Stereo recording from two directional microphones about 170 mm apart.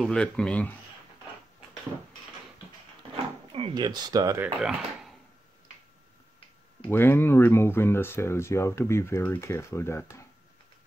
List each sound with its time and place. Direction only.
0.0 s speech: 5° left (ahead or behind)
3.5 s speech: 30° right (ahead or behind)
4.6 s speech: centre (ahead or behind)
6.8 s speech: 10° left (ahead or behind)